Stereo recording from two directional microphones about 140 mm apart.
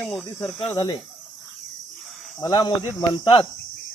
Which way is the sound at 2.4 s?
30° left (ahead or behind).